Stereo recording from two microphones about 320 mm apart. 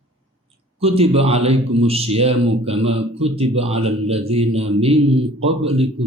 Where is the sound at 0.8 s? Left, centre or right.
Centre.